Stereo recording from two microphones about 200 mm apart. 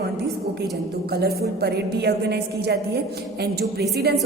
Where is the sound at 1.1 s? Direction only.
50° right (ahead or behind).